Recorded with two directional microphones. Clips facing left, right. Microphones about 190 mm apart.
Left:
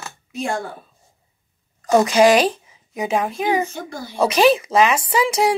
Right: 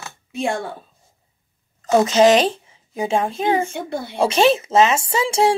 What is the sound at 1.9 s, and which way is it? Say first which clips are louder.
Speech: even; 25° right (ahead or behind).